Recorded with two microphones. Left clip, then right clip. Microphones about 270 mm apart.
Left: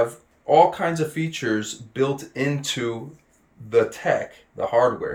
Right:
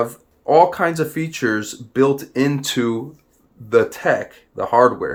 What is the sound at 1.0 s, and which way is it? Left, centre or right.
Speech, centre.